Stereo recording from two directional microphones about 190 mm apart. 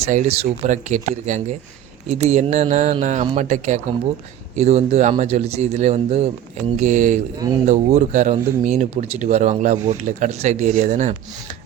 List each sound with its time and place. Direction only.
0.0 s speech: 35° right (ahead or behind)